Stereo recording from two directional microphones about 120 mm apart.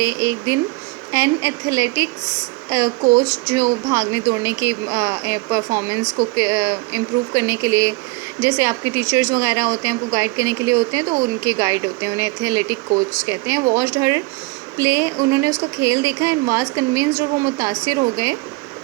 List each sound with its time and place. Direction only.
0.0 s speech: 25° right (ahead or behind)